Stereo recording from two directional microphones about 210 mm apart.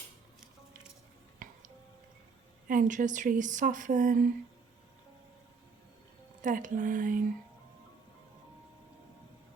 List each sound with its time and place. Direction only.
1.4 s music: 40° right (ahead or behind)
2.6 s speech: 40° right (ahead or behind)
6.4 s speech: 40° right (ahead or behind)